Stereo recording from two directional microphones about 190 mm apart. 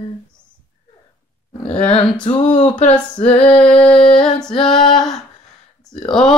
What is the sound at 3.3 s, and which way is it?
Female singing, 30° left (ahead or behind).